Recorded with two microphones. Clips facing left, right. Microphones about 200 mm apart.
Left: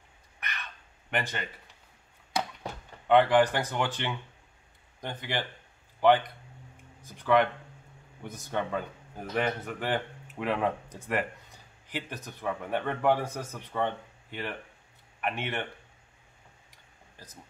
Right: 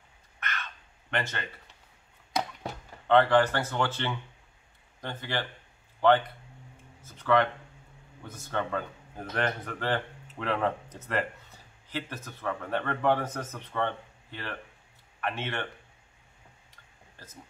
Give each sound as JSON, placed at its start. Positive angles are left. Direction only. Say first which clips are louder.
{"t": 1.1, "sound": "speech", "louder": "even", "side_deg": 15}
{"t": 3.1, "sound": "speech", "louder": "even", "side_deg": 15}